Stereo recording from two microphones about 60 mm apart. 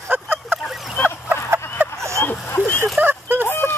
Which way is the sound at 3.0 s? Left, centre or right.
Right.